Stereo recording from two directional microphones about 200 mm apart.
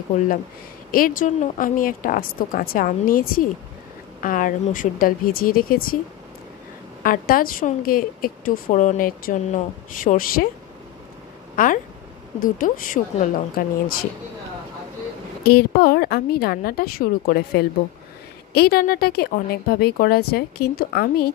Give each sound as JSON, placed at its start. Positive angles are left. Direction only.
{"t": 0.9, "sound": "a woman's voice", "side_deg": 45}
{"t": 7.0, "sound": "a woman's voice", "side_deg": 45}
{"t": 11.5, "sound": "a woman's voice", "side_deg": 40}
{"t": 15.4, "sound": "a woman's voice", "side_deg": 50}